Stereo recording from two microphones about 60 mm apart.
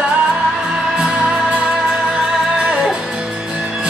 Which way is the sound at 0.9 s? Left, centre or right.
Centre.